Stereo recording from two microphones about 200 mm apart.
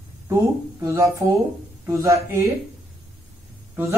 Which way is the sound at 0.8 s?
15° right (ahead or behind).